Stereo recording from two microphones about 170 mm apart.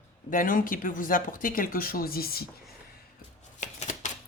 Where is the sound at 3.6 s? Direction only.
45° left (ahead or behind).